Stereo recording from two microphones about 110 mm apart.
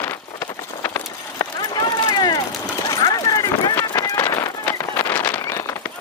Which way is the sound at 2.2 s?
40° left (ahead or behind).